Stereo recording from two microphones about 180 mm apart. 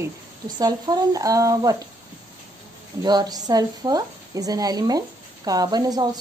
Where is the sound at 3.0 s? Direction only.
20° right (ahead or behind).